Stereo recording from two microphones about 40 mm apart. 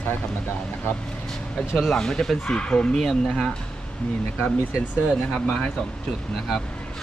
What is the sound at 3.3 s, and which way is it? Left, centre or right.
Speech, centre.